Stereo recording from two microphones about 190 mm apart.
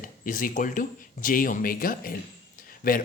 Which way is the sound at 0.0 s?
45° left (ahead or behind).